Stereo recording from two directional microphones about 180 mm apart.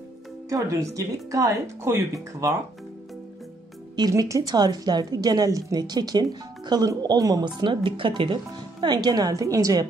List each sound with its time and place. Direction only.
0.5 s speech: 20° right (ahead or behind)
3.9 s speech: 20° right (ahead or behind)